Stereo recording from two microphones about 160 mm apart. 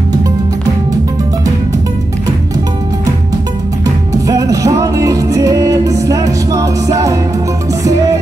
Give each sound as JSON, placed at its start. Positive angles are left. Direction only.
{"t": 3.8, "sound": "music", "side_deg": -20}